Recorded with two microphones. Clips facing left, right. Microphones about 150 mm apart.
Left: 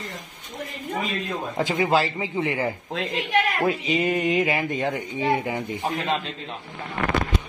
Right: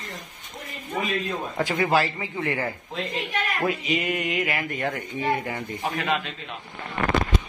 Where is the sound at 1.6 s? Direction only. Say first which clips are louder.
Left 1 dB; 15° left (ahead or behind).